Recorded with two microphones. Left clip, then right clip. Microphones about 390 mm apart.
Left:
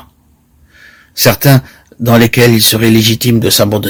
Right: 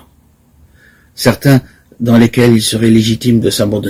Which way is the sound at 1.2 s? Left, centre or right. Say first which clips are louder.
Left 2 dB; left.